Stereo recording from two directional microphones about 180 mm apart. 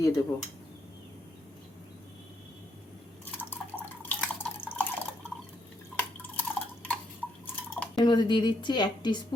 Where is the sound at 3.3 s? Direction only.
10° left (ahead or behind).